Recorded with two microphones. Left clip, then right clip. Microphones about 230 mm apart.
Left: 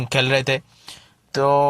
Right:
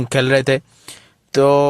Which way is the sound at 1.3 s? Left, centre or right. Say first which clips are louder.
Right 4 dB; right.